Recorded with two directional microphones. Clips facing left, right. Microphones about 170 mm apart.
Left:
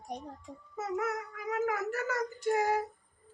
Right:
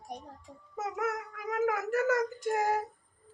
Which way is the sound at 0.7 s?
50° right (ahead or behind).